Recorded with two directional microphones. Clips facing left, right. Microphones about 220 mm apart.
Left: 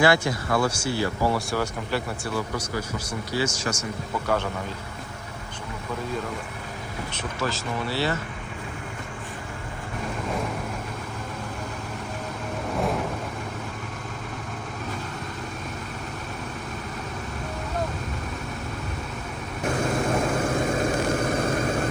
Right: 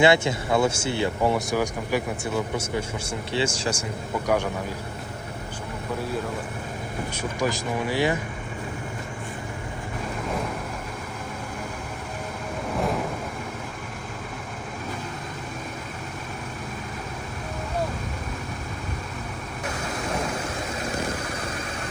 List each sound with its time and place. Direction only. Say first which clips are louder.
0.0 s speech: right 2 dB; 25° right (ahead or behind)
4.1 s speech: right 2 dB; 15° right (ahead or behind)
7.1 s speech: right 3 dB; 10° right (ahead or behind)
12.7 s vehicle: even; centre (ahead or behind)